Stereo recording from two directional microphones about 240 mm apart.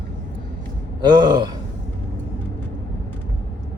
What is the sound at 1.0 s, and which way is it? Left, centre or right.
Speech, centre.